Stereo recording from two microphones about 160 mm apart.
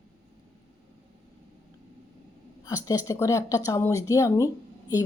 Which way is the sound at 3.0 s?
20° left (ahead or behind).